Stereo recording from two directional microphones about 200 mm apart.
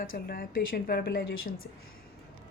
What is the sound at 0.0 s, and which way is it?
A woman's voice, 45° left (ahead or behind).